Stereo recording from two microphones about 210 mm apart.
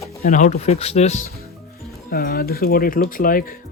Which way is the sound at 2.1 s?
45° left (ahead or behind).